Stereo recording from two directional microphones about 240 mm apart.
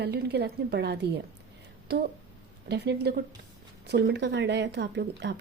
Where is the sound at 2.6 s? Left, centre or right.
Right.